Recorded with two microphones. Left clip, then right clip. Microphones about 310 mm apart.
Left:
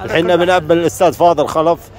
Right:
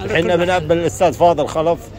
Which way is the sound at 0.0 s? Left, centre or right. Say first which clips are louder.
Left 3 dB; centre.